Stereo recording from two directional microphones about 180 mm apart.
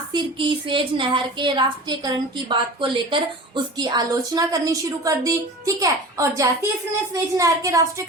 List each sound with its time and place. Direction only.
0.1 s a woman's voice: 30° right (ahead or behind)